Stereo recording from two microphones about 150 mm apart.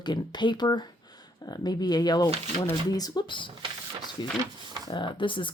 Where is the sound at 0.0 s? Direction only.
30° left (ahead or behind).